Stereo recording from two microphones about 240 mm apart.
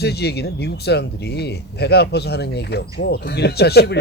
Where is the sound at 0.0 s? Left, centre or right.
Left.